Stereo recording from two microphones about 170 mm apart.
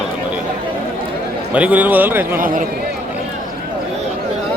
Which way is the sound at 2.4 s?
55° right (ahead or behind).